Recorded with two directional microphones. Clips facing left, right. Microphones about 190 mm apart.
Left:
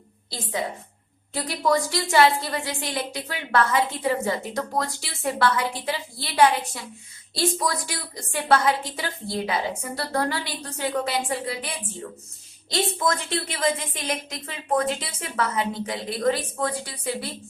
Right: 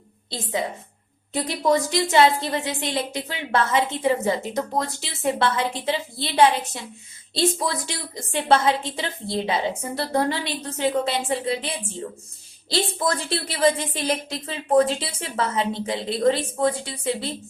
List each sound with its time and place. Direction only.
0.3 s a woman's voice: 20° right (ahead or behind)